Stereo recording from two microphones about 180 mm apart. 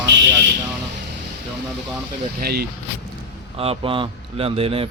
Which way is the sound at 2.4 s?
60° right (ahead or behind).